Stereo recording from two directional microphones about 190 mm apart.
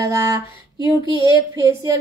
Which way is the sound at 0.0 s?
15° right (ahead or behind).